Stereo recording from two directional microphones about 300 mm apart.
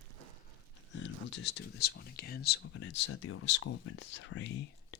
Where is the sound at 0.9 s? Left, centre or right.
Left.